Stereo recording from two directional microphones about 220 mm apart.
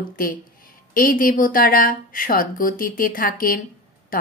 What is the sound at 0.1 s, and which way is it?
A woman's voice, 40° left (ahead or behind).